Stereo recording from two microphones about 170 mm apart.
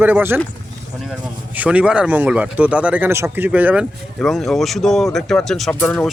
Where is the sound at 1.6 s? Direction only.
5° right (ahead or behind).